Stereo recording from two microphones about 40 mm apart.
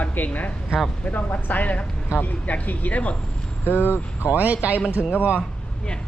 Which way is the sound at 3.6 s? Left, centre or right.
Left.